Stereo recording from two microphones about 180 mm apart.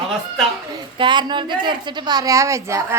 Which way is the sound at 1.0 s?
25° right (ahead or behind).